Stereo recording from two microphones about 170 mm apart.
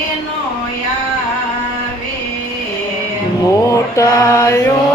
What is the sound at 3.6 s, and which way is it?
Mantra, 20° left (ahead or behind).